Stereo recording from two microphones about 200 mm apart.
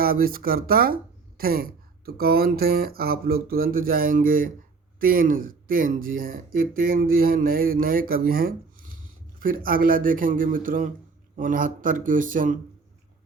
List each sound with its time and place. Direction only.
0.0 s speech: 45° right (ahead or behind)